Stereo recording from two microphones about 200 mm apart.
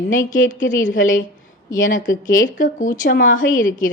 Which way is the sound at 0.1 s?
40° left (ahead or behind).